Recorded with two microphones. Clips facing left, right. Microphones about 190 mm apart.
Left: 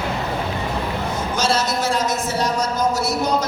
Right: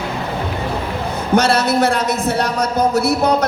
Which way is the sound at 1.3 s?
60° right (ahead or behind).